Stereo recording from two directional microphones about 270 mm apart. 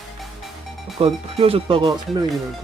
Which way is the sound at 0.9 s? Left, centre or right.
Right.